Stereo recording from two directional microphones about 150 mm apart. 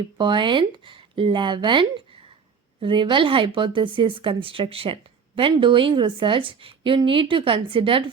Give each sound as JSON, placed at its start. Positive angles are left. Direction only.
{"t": 0.0, "sound": "speech", "side_deg": -30}